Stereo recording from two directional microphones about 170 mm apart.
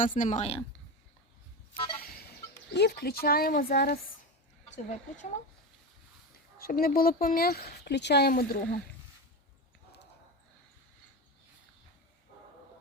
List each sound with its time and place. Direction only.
0.0 s speech: 50° left (ahead or behind)
2.7 s speech: 75° left (ahead or behind)
4.9 s speech: 45° left (ahead or behind)
6.6 s speech: 60° left (ahead or behind)